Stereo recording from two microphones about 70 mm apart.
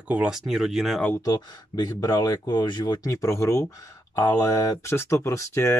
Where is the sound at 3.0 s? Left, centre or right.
Left.